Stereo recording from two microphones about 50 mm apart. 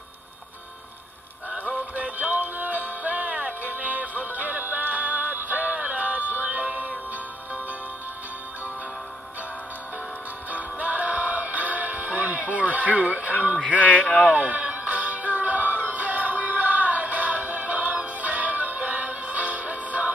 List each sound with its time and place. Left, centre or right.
1.5 s music: right
10.5 s music: right
13.8 s speech: left
14.3 s music: right